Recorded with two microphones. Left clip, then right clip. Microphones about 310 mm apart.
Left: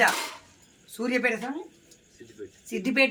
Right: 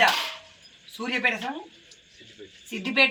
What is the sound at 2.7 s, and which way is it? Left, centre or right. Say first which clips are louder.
Speech: right 1 dB; centre.